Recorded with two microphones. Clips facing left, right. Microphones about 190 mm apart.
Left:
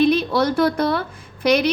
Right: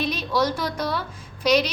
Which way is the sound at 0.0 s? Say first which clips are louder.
Left 7 dB; 55° left (ahead or behind).